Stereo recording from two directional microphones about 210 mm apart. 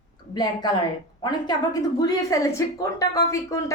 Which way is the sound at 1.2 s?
20° left (ahead or behind).